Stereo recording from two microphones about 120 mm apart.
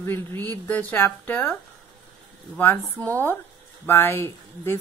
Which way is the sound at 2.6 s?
15° left (ahead or behind).